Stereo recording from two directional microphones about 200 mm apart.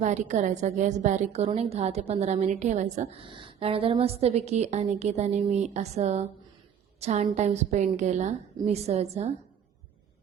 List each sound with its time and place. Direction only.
0.0 s a woman's voice: 35° right (ahead or behind)